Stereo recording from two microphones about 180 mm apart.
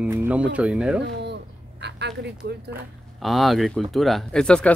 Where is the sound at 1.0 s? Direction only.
70° right (ahead or behind).